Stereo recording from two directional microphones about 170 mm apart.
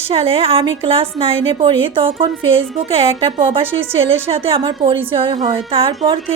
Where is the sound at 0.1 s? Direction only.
35° right (ahead or behind).